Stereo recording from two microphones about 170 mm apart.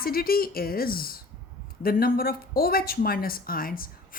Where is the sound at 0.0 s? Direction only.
60° left (ahead or behind).